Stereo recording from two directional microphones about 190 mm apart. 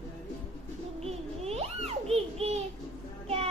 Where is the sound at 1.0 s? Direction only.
30° right (ahead or behind).